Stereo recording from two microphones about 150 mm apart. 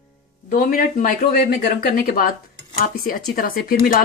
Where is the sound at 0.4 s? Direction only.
70° left (ahead or behind).